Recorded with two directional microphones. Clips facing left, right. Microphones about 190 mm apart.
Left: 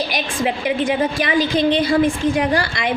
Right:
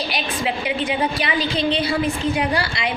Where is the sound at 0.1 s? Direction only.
45° left (ahead or behind).